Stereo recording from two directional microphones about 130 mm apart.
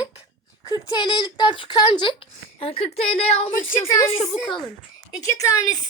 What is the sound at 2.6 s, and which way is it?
Speech, 50° left (ahead or behind).